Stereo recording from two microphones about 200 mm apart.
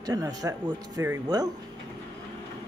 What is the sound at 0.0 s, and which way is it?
Speech, 20° right (ahead or behind).